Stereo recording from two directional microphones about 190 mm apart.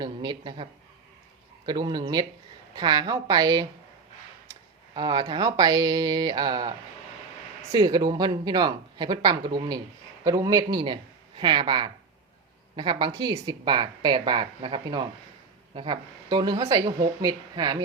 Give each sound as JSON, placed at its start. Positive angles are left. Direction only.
{"t": 0.0, "sound": "a woman's voice", "side_deg": -20}
{"t": 4.9, "sound": "a woman's voice", "side_deg": -20}